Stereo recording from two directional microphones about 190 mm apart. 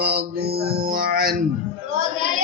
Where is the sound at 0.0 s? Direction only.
55° right (ahead or behind).